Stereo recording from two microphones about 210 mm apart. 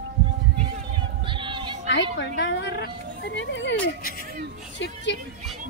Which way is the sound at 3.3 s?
60° left (ahead or behind).